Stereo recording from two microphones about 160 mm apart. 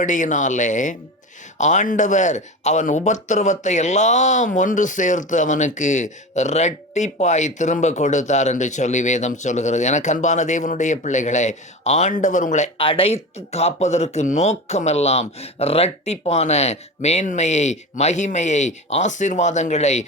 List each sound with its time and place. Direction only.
0.0 s speech: 50° left (ahead or behind)